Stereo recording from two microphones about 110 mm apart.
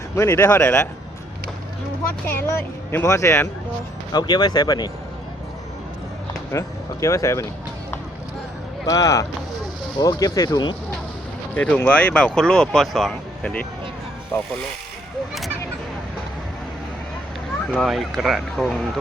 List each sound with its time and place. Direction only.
0.2 s speech: 25° left (ahead or behind)
2.2 s speech: 20° left (ahead or behind)
4.1 s speech: 40° left (ahead or behind)
6.5 s speech: 30° left (ahead or behind)
8.9 s speech: 30° left (ahead or behind)
11.5 s speech: 10° left (ahead or behind)
14.3 s speech: 20° left (ahead or behind)
17.7 s speech: centre (ahead or behind)